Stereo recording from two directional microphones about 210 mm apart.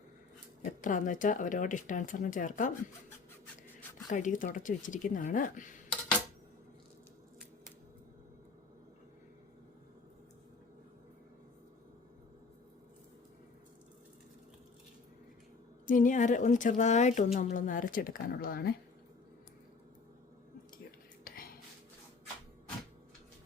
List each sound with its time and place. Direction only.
0.6 s speech: 40° left (ahead or behind)
4.1 s speech: 35° left (ahead or behind)
15.9 s speech: 40° left (ahead or behind)
21.3 s whispering: 45° left (ahead or behind)